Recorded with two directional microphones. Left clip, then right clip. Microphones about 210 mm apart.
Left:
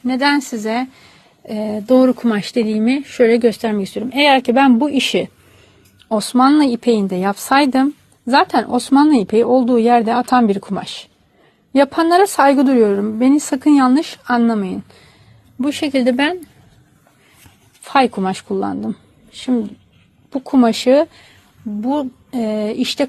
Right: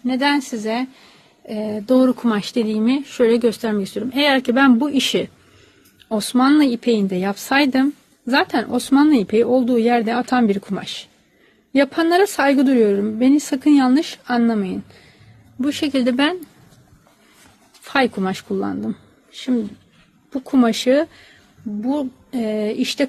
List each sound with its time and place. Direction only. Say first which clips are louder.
0.0 s speech: left 3 dB; 15° left (ahead or behind); by 16.5 s centre (ahead or behind)
17.8 s a woman's voice: left 4 dB; 5° left (ahead or behind)